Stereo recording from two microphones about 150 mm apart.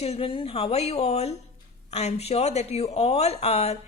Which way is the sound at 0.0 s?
40° left (ahead or behind).